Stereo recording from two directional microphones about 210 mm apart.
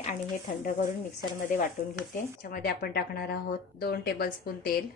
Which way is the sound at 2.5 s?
45° left (ahead or behind).